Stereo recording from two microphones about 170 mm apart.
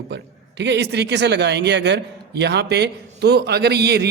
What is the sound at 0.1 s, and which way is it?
A man's voice, 90° right.